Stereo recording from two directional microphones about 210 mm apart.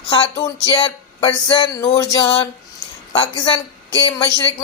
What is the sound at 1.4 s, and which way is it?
Music, 20° left (ahead or behind).